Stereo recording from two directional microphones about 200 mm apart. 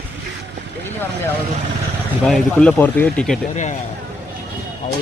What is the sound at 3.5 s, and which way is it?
Speech, 35° left (ahead or behind).